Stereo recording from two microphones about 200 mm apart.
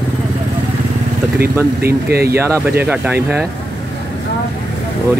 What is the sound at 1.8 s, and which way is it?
Speech, 50° right (ahead or behind).